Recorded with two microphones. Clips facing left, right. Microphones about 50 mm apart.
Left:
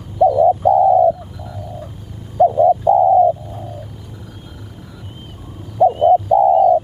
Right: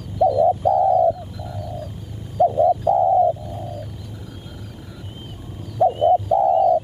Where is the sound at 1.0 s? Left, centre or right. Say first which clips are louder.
Left 4 dB; centre.